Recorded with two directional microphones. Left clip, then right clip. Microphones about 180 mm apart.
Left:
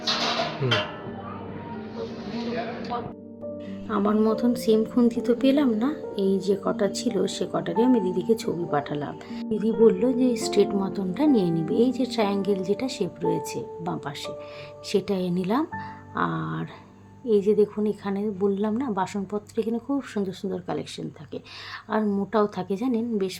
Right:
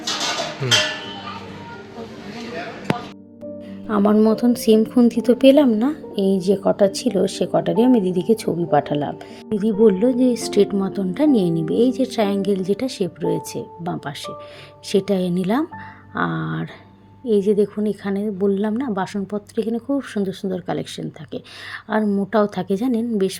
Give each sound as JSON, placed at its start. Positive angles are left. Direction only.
{"t": 3.8, "sound": "a woman's voice", "side_deg": -35}